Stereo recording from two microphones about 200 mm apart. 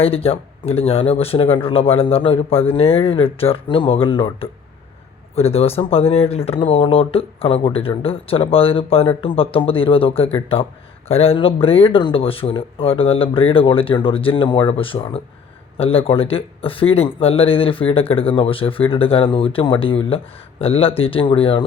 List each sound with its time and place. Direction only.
0.0 s speech: 30° left (ahead or behind)